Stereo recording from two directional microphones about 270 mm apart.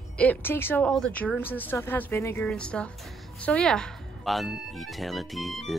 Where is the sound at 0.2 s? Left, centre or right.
Centre.